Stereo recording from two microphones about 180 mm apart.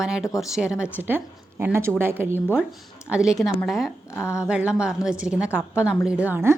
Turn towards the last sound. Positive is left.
turn(degrees=-10)  # may be behind; listen again after turning